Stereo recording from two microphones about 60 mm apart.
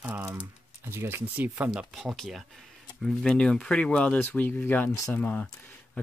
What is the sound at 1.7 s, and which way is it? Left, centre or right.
Speech, centre.